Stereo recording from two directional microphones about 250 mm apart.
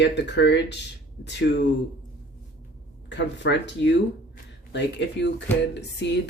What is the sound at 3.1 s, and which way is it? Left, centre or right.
Speech, left.